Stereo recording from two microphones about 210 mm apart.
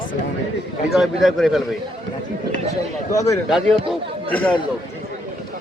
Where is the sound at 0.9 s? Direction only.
Centre (ahead or behind).